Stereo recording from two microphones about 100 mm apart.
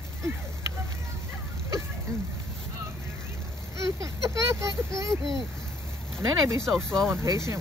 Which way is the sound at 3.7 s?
30° right (ahead or behind).